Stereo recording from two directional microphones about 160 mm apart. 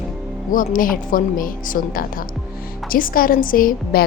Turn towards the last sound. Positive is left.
turn(degrees=60)  # may be behind; listen again after turning